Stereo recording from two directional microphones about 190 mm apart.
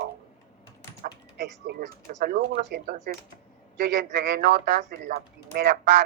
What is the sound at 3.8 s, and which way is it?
Speech, 60° right (ahead or behind).